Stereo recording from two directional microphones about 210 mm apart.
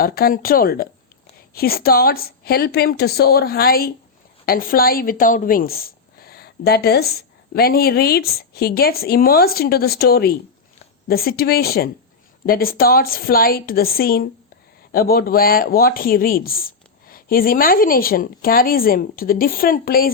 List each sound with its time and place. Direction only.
0.0 s speech: 45° left (ahead or behind)